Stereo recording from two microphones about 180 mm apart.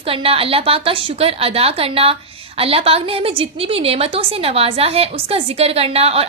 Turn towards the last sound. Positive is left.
turn(degrees=-35)  # may be behind; listen again after turning